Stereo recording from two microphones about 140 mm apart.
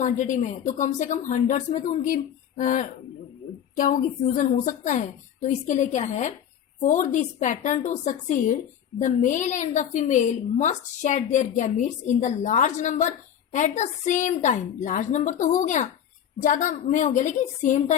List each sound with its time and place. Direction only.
0.0 s a woman's voice: 60° left (ahead or behind)